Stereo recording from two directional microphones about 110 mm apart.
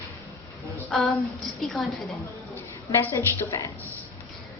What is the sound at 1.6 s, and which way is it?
Speech, centre (ahead or behind).